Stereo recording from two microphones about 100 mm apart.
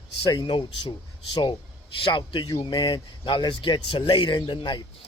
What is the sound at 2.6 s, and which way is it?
Speech, 45° left (ahead or behind).